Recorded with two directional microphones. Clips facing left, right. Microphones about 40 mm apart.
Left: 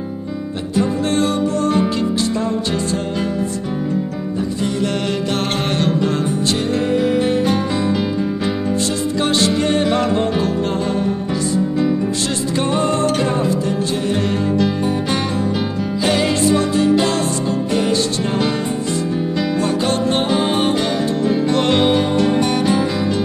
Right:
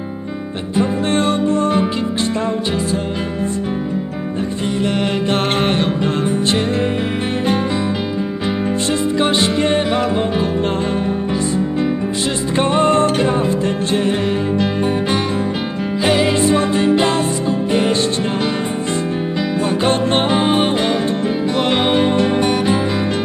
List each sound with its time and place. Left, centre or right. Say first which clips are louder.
0.7 s music: right 1 dB; right
4.6 s music: right 3 dB; right
9.2 s music: left 1 dB; right
12.5 s music: right 5 dB; right
14.1 s music: even; right
19.8 s music: right 2 dB; right
21.5 s music: even; centre
21.9 s music: right 1 dB; right